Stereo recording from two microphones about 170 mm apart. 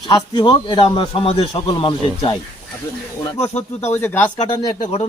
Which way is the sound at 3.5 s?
40° left (ahead or behind).